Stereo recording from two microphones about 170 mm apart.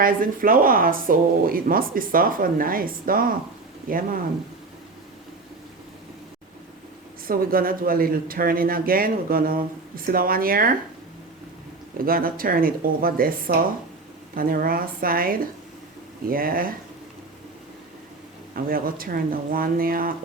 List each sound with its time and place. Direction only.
0.0 s speech: 55° right (ahead or behind)
7.3 s speech: 55° right (ahead or behind)
11.9 s speech: 60° right (ahead or behind)
18.5 s speech: 60° right (ahead or behind)